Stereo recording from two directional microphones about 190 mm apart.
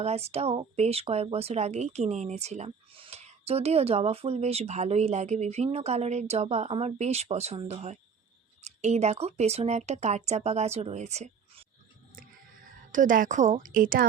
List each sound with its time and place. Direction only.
0.0 s speech: 35° right (ahead or behind)
12.9 s a woman's voice: 45° right (ahead or behind)